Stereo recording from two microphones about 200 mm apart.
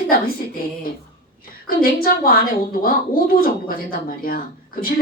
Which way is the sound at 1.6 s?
45° left (ahead or behind).